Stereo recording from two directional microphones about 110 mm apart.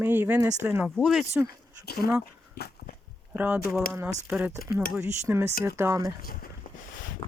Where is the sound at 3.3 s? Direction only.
10° right (ahead or behind); by 6.1 s 25° right (ahead or behind).